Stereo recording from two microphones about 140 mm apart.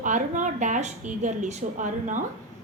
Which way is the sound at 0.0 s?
60° right (ahead or behind).